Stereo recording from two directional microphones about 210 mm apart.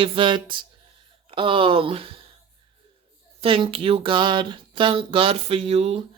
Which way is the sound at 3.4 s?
25° right (ahead or behind).